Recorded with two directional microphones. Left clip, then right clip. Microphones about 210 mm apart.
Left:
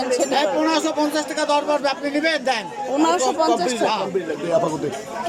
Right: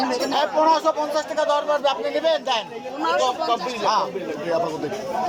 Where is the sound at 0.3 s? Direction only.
20° left (ahead or behind).